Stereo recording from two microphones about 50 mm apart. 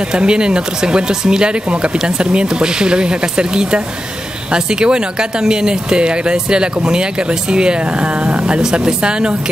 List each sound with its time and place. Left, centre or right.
0.1 s speech: centre